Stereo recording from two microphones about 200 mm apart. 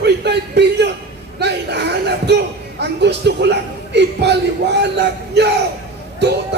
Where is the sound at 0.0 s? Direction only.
55° right (ahead or behind).